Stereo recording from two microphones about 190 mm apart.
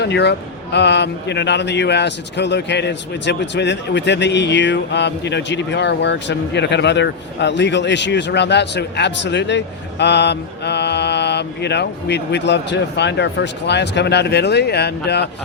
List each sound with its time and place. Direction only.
0.0 s speech: 65° left (ahead or behind)